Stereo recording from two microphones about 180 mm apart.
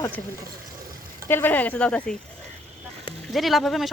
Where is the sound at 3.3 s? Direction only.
Centre (ahead or behind).